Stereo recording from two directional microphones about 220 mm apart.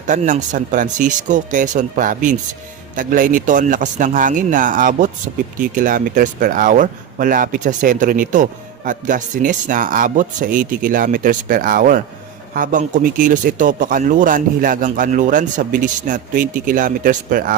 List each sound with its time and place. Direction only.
0.1 s speech: 35° right (ahead or behind)